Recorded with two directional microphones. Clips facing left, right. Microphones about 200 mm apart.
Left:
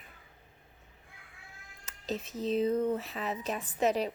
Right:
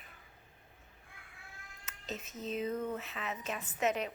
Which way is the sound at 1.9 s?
35° left (ahead or behind).